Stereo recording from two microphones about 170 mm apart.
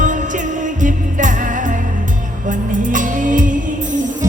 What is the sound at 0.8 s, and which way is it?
Music, 50° right (ahead or behind).